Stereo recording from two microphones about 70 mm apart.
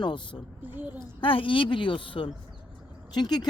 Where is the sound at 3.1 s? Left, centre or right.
Left.